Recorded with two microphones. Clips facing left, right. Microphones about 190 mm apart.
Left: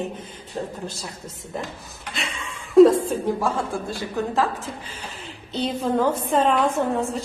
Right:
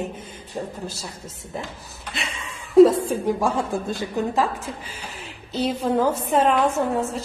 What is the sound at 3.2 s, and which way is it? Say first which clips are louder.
A woman's voice: right 1 dB; 15° right (ahead or behind).